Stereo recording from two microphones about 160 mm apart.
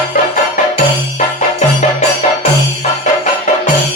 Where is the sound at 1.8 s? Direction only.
45° left (ahead or behind).